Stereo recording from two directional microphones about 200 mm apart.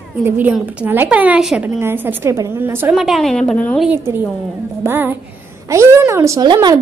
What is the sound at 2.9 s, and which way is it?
Speech, centre (ahead or behind).